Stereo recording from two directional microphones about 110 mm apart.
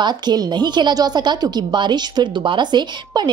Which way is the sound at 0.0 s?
40° right (ahead or behind).